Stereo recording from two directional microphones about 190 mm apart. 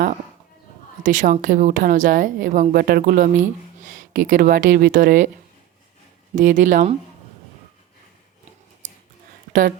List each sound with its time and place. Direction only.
1.0 s a woman's voice: 40° right (ahead or behind)
6.3 s a woman's voice: 45° right (ahead or behind)
9.5 s speech: 50° right (ahead or behind)